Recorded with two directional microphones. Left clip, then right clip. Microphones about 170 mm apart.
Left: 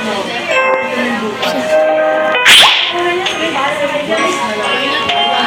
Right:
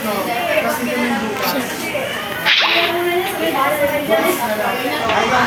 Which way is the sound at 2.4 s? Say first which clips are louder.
Left 7 dB; 5° right (ahead or behind).